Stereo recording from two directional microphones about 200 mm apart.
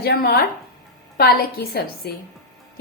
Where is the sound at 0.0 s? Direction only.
50° left (ahead or behind).